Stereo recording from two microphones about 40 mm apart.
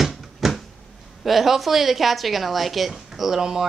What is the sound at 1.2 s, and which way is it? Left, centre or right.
A woman's voice, centre.